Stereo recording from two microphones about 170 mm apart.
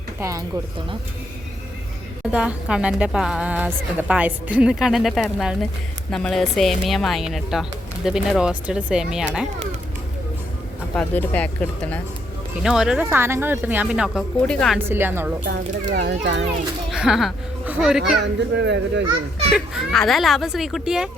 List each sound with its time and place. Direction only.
0.2 s a woman's voice: 20° right (ahead or behind)
2.3 s a woman's voice: 5° right (ahead or behind)
10.9 s speech: 10° left (ahead or behind)
12.6 s a woman's voice: 5° right (ahead or behind)
14.8 s a woman's voice: 15° right (ahead or behind)
15.4 s a child's voice: 85° right
16.9 s a child's voice: 5° right (ahead or behind)
18.2 s a child's voice: 90° right
19.5 s a woman's voice: centre (ahead or behind)